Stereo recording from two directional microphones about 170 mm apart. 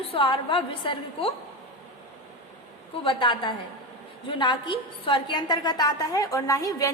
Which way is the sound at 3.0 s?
30° left (ahead or behind).